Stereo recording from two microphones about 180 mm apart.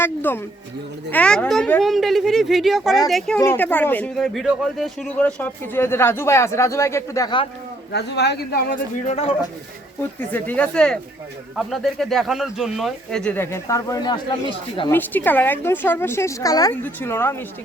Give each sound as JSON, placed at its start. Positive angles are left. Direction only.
{"t": 0.0, "sound": "speech", "side_deg": 10}
{"t": 7.9, "sound": "speech", "side_deg": 65}
{"t": 9.0, "sound": "speech", "side_deg": 35}
{"t": 10.2, "sound": "speech", "side_deg": 10}
{"t": 14.8, "sound": "speech", "side_deg": 10}